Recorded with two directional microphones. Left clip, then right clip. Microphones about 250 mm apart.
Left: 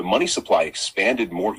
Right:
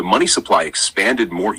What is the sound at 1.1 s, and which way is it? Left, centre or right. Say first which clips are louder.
Speech: right 4 dB; right.